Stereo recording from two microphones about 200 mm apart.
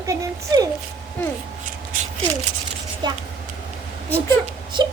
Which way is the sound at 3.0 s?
20° right (ahead or behind).